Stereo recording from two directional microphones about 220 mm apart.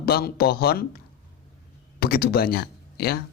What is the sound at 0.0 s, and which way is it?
Speech, 45° left (ahead or behind).